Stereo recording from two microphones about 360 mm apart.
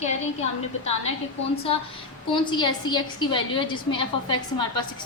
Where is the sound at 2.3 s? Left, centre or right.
Centre.